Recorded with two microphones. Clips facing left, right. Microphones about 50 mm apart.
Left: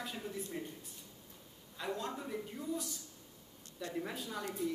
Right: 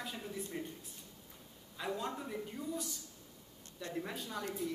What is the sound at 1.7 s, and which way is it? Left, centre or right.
A woman's voice, centre.